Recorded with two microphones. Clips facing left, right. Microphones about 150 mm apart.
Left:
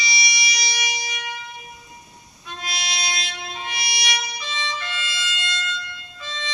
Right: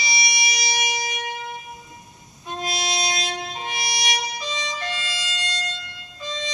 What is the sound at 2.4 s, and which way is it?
Music, 45° right (ahead or behind).